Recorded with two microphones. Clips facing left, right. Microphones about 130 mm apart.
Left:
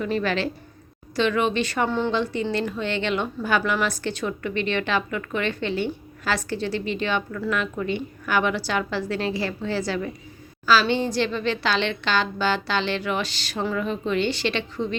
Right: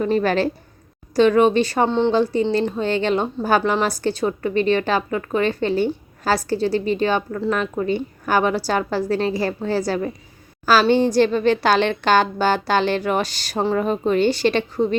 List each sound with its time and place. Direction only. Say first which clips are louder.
0.0 s a woman's voice: right 6 dB; 40° right (ahead or behind); by 2.1 s 25° right (ahead or behind)
2.1 s a woman's voice: right 6 dB; 35° right (ahead or behind)